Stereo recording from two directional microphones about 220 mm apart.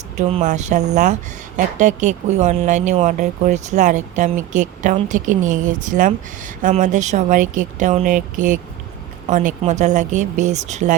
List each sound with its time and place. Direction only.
0.2 s speech: 30° right (ahead or behind)